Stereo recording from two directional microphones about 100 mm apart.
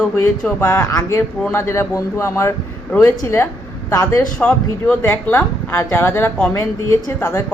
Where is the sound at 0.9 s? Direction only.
30° left (ahead or behind).